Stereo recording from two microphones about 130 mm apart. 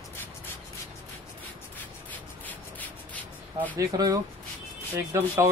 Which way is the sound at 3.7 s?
25° right (ahead or behind).